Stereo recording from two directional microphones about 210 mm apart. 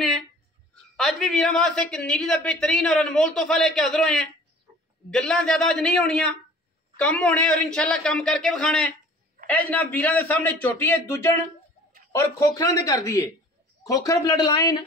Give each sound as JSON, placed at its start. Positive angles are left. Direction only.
{"t": 0.9, "sound": "a woman's voice", "side_deg": 0}